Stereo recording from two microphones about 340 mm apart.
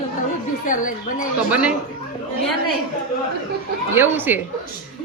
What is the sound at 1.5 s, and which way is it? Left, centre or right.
Speech, centre.